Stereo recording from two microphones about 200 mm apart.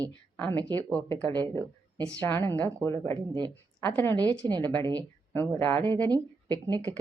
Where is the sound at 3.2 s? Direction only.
20° right (ahead or behind).